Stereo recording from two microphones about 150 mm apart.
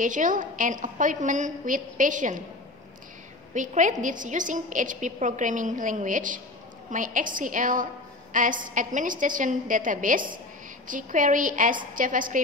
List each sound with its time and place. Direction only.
0.0 s a woman's voice: 60° right (ahead or behind)
3.5 s a woman's voice: 60° right (ahead or behind)